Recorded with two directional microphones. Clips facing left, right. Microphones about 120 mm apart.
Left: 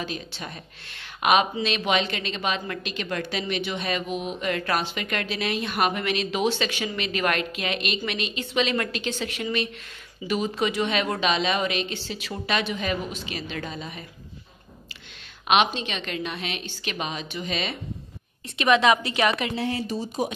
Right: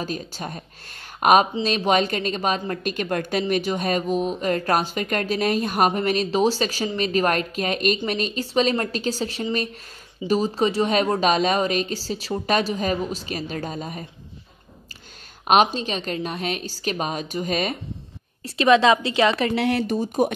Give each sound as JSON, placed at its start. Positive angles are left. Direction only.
{"t": 0.0, "sound": "speech", "side_deg": -40}
{"t": 15.4, "sound": "speech", "side_deg": -40}
{"t": 18.4, "sound": "a woman's voice", "side_deg": -30}
{"t": 19.5, "sound": "speech", "side_deg": -75}